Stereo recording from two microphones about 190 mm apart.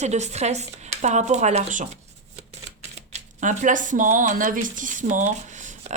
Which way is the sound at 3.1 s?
40° right (ahead or behind).